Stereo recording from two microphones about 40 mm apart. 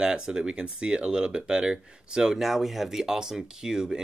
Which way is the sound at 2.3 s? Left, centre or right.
Centre.